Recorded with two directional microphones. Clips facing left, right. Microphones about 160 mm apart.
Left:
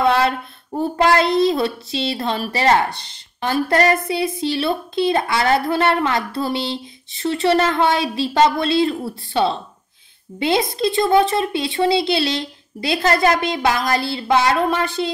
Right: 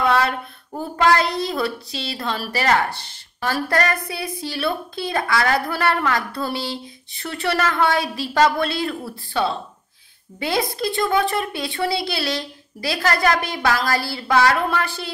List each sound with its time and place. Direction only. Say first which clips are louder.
0.0 s speech: left 3 dB; 25° left (ahead or behind)